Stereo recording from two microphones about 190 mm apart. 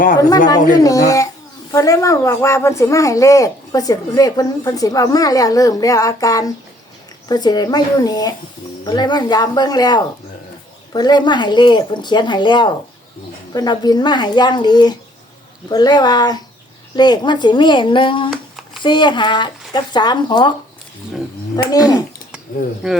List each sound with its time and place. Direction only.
0.2 s speech: 20° left (ahead or behind)
18.3 s a sound: centre (ahead or behind)
18.8 s speech: 25° left (ahead or behind)
22.8 s speech: 5° right (ahead or behind)